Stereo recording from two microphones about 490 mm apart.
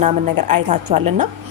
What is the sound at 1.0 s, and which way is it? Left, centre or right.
Speech, right.